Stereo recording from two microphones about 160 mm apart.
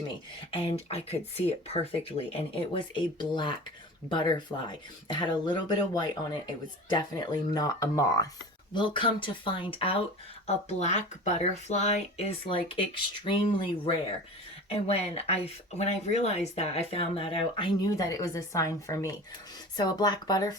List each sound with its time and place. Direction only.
0.1 s speech: 35° left (ahead or behind)